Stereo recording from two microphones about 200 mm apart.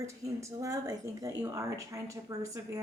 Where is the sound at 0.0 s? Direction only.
15° right (ahead or behind).